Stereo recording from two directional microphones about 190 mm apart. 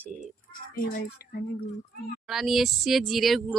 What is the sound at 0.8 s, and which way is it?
Speech, 50° left (ahead or behind).